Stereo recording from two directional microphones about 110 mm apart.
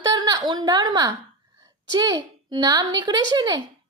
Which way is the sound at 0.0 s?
40° right (ahead or behind).